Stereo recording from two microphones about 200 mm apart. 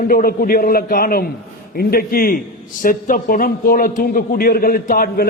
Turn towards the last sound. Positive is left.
turn(degrees=45)  # may be behind; listen again after turning